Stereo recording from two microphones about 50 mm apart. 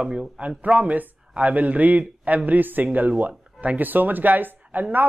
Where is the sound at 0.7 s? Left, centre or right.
Right.